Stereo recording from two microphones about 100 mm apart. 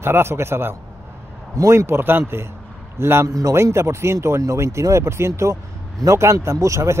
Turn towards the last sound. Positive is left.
turn(degrees=-30)  # may be behind; listen again after turning